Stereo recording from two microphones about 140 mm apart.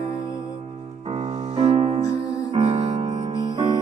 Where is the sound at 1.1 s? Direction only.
50° right (ahead or behind).